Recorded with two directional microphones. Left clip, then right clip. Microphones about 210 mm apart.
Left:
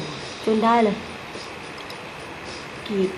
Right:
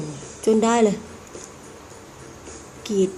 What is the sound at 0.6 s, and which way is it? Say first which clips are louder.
Speech: left 2 dB; 20° right (ahead or behind).